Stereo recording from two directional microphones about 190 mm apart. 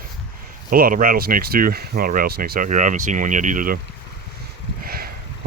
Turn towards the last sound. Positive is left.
turn(degrees=-50)  # may be behind; listen again after turning